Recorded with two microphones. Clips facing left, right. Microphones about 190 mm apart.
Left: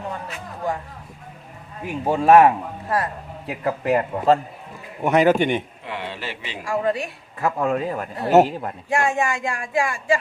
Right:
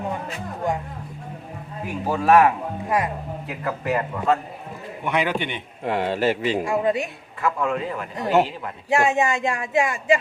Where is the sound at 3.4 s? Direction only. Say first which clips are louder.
Left 5 dB; 30° left (ahead or behind).